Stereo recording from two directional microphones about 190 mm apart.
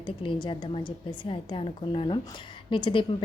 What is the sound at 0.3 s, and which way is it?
A woman's voice, 25° left (ahead or behind).